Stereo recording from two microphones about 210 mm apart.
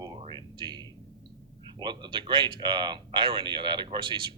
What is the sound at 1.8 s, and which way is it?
A man's voice, 20° right (ahead or behind).